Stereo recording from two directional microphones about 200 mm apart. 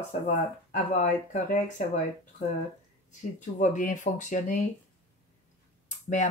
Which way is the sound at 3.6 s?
40° left (ahead or behind).